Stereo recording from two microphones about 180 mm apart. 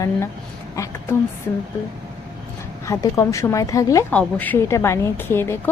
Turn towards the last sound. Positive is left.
turn(degrees=10)  # may be behind; listen again after turning